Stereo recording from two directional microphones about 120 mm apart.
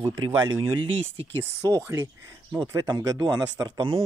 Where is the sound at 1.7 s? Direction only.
25° right (ahead or behind).